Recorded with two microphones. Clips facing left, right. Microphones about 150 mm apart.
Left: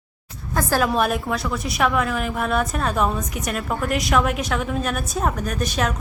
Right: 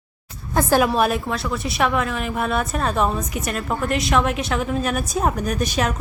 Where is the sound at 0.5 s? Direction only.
20° right (ahead or behind).